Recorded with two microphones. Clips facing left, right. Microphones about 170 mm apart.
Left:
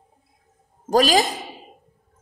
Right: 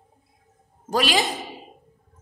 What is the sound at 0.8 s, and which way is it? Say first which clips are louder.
Speech: left 5 dB; 40° left (ahead or behind).